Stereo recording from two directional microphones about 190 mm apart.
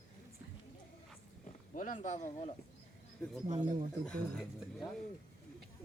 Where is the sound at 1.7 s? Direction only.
45° left (ahead or behind).